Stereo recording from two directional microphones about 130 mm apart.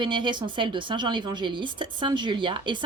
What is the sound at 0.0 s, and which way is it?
Speech, 40° right (ahead or behind).